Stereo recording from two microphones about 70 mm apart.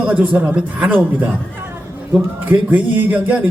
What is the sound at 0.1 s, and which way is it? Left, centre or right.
Speech, right.